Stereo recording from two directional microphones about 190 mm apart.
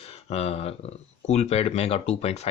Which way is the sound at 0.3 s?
35° left (ahead or behind).